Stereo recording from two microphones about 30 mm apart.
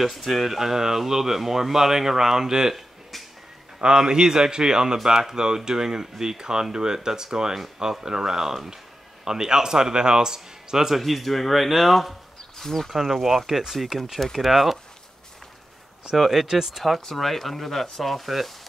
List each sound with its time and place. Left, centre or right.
0.0 s speech: centre
0.6 s speech: centre
2.7 s a sound: centre
3.8 s speech: right
11.0 s speech: centre
12.5 s speech: centre
12.9 s speech: centre
16.2 s speech: centre
16.4 s speech: centre
16.7 s speech: centre